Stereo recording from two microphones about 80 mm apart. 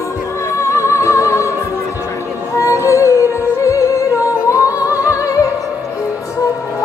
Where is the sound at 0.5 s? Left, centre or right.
Left.